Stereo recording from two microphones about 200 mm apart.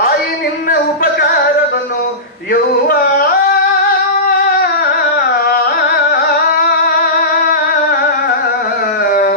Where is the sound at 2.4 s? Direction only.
50° left (ahead or behind).